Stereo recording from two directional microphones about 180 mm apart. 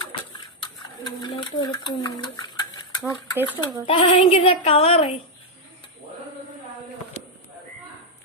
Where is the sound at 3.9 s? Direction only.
30° left (ahead or behind).